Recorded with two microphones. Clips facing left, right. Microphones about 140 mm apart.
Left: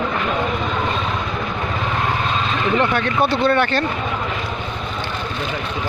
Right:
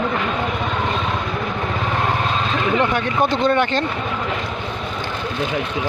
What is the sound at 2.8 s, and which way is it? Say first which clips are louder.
Speech: left 1 dB; 15° right (ahead or behind).